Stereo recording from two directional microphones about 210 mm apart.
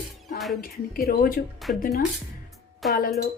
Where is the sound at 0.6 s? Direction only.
45° left (ahead or behind).